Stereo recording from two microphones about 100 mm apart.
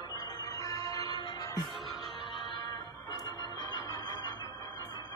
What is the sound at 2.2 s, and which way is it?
Organ, 50° left (ahead or behind).